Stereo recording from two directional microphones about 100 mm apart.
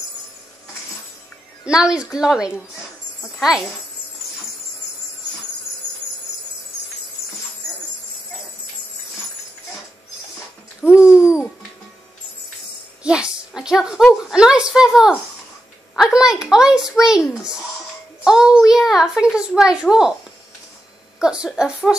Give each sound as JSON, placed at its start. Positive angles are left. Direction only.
{"t": 1.7, "sound": "a woman's voice", "side_deg": -10}
{"t": 10.8, "sound": "babbling", "side_deg": -10}
{"t": 13.0, "sound": "a woman's voice", "side_deg": -10}
{"t": 21.2, "sound": "a woman's voice", "side_deg": -10}